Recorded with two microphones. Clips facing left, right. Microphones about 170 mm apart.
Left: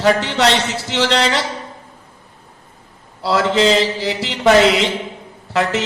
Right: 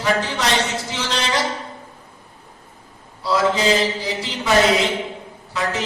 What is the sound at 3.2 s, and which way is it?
Mantra, 75° left (ahead or behind).